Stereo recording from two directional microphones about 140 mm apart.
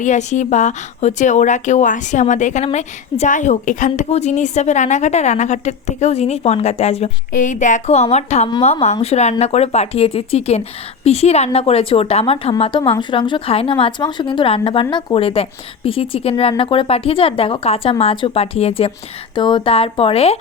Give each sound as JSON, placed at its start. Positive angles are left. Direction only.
{"t": 0.0, "sound": "a woman's voice", "side_deg": 60}
{"t": 7.3, "sound": "speech", "side_deg": 65}
{"t": 19.3, "sound": "speech", "side_deg": 35}